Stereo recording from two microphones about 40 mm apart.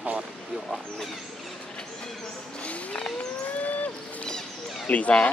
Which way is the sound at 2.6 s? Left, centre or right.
Left.